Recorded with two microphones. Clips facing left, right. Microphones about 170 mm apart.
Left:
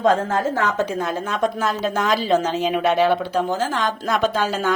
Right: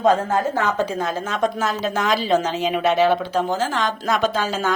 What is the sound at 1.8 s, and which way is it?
A woman's voice, 50° left (ahead or behind).